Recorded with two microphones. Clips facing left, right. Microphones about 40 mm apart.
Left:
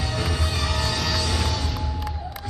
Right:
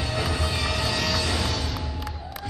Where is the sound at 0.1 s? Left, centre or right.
Centre.